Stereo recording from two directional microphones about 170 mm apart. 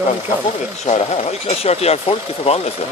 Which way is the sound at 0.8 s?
40° left (ahead or behind).